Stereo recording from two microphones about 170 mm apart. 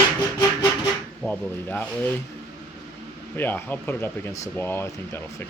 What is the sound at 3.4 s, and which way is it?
Speech, 10° left (ahead or behind).